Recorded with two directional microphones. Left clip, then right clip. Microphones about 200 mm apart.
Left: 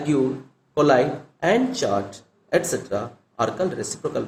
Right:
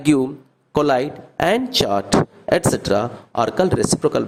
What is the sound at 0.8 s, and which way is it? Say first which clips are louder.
Speech: even; 55° right (ahead or behind).